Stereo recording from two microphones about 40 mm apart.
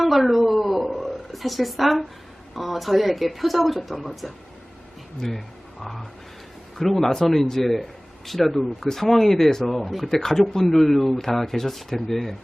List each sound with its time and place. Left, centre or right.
0.0 s speech: centre
0.9 s a sound: centre
2.6 s speech: centre
5.2 s speech: centre
6.8 s speech: centre